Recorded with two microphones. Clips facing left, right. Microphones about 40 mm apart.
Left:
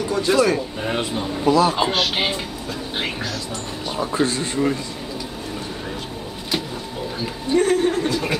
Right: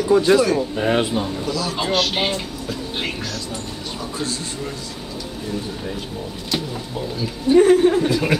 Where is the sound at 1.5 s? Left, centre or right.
Left.